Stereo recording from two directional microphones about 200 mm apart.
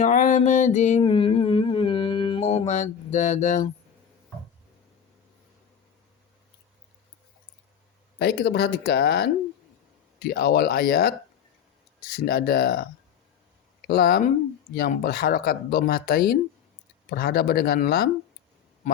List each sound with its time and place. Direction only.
0.0 s mantra: 40° left (ahead or behind)
8.2 s speech: 55° left (ahead or behind)
12.1 s speech: 50° left (ahead or behind)